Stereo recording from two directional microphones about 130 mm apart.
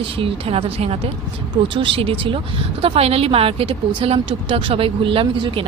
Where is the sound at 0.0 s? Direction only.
45° right (ahead or behind).